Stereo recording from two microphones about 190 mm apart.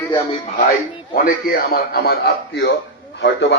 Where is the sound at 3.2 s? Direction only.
65° left (ahead or behind).